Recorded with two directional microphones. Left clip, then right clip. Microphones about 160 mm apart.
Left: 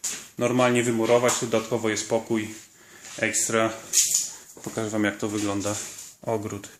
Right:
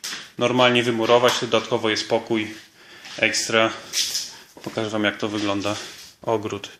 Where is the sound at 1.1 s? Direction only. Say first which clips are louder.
Right 5 dB; 15° left (ahead or behind).